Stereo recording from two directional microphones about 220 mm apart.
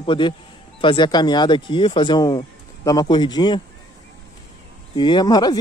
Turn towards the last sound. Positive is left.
turn(degrees=20)  # may be behind; listen again after turning